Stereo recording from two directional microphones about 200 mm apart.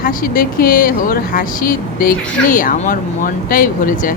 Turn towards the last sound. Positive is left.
turn(degrees=45)  # may be behind; listen again after turning